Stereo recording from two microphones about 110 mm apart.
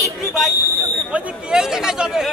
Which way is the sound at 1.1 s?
5° right (ahead or behind).